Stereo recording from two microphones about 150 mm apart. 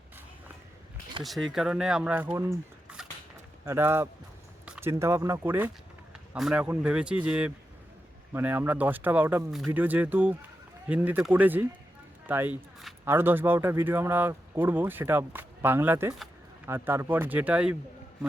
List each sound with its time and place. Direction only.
1.2 s speech: centre (ahead or behind)
2.5 s a sound: 5° right (ahead or behind)
3.7 s speech: 15° right (ahead or behind)